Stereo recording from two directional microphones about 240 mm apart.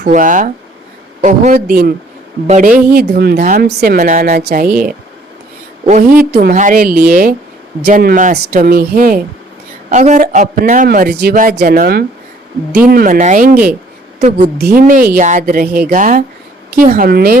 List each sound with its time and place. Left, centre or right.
0.0 s speech: right
5.8 s a woman's voice: right